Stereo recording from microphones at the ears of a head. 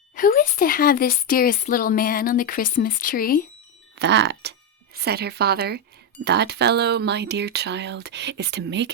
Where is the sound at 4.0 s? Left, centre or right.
Right.